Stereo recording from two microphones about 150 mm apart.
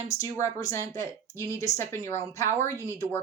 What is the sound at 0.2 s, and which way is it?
Speech, 20° left (ahead or behind).